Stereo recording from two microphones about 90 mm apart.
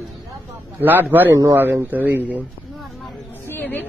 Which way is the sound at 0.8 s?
25° right (ahead or behind).